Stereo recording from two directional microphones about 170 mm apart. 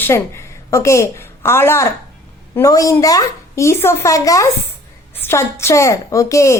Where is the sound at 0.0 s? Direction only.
15° left (ahead or behind).